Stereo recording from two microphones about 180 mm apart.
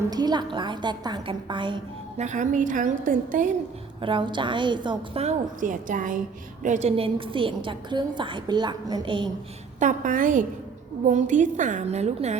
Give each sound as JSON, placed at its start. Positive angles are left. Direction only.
{"t": 0.1, "sound": "a woman's voice", "side_deg": -20}
{"t": 2.1, "sound": "a woman's voice", "side_deg": -40}
{"t": 4.0, "sound": "a woman's voice", "side_deg": -25}
{"t": 5.5, "sound": "a woman's voice", "side_deg": -45}
{"t": 9.8, "sound": "a woman's voice", "side_deg": -45}